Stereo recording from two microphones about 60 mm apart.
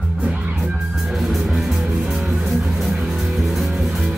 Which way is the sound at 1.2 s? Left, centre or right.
Centre.